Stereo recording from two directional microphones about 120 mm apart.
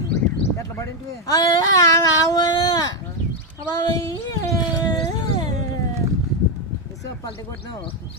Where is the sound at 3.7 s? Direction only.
30° left (ahead or behind).